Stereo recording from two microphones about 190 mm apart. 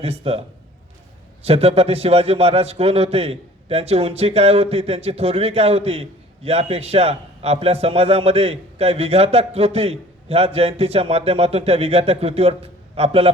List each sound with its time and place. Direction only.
0.0 s a man's voice: 30° right (ahead or behind)
1.5 s a man's voice: 30° right (ahead or behind)